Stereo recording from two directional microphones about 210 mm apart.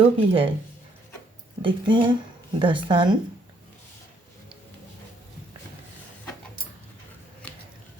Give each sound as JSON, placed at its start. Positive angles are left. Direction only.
{"t": 0.0, "sound": "speech", "side_deg": -25}
{"t": 1.6, "sound": "speech", "side_deg": -25}